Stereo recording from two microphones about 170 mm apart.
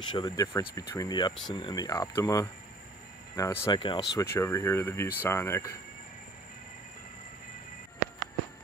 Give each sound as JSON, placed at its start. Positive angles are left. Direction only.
{"t": 0.1, "sound": "speech", "side_deg": 20}